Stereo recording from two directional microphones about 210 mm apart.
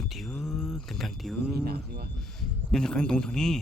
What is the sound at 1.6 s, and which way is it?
Speech, 45° right (ahead or behind).